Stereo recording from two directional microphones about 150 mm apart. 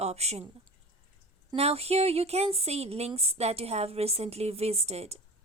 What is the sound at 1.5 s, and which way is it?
A woman's voice, 45° right (ahead or behind).